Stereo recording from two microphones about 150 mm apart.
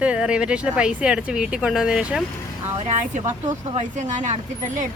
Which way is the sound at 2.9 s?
55° right (ahead or behind).